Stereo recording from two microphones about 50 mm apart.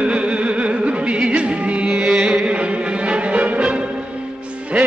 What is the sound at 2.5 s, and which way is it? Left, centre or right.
Music, right.